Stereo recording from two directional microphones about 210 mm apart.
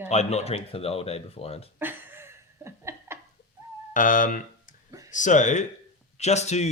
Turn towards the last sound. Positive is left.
turn(degrees=30)  # may be behind; listen again after turning